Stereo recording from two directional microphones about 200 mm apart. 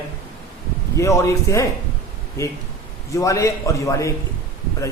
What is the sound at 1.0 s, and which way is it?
A man's voice, 15° left (ahead or behind).